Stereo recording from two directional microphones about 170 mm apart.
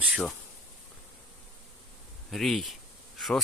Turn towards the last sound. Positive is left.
turn(degrees=0)  # may be behind; listen again after turning